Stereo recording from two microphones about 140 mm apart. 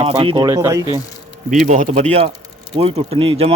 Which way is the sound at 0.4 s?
25° right (ahead or behind).